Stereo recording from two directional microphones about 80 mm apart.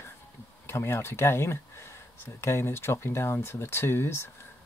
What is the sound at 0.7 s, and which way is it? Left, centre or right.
Speech, left.